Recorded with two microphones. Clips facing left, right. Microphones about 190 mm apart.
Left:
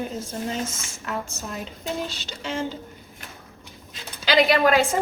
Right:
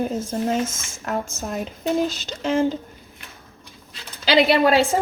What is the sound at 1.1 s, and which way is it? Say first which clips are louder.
Speech: right 5 dB; 45° right (ahead or behind).